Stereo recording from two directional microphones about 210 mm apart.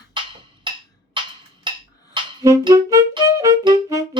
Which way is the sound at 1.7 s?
20° right (ahead or behind).